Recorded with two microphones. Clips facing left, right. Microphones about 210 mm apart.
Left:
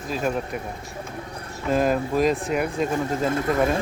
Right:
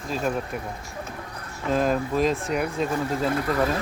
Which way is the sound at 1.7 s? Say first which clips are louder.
Left 2 dB; 5° left (ahead or behind).